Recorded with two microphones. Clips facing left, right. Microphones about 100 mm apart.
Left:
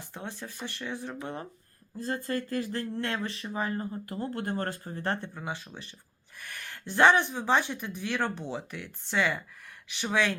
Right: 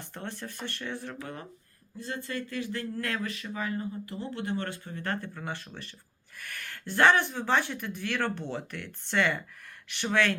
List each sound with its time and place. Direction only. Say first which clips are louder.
0.0 s speech: right 1 dB; 10° left (ahead or behind)
2.0 s speech: left 4 dB; 40° left (ahead or behind)
2.9 s speech: left 1 dB; 25° left (ahead or behind)
5.3 s speech: even; 15° left (ahead or behind)